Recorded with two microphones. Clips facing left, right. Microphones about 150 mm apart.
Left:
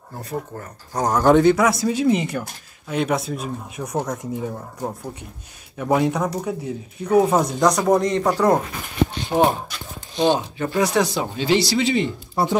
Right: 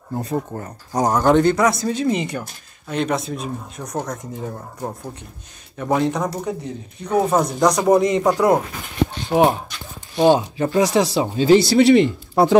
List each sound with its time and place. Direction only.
0.2 s speech: 20° right (ahead or behind)
1.1 s speech: centre (ahead or behind)
10.8 s speech: 35° right (ahead or behind)
11.7 s speech: 75° right (ahead or behind)